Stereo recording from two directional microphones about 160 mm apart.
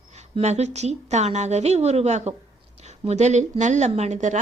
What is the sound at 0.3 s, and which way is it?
A woman's voice, 45° right (ahead or behind).